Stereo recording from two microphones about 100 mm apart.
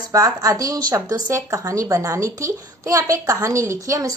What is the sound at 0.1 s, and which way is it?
A woman's voice, 35° right (ahead or behind).